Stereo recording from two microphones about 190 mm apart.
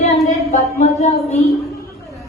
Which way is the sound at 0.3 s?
35° left (ahead or behind).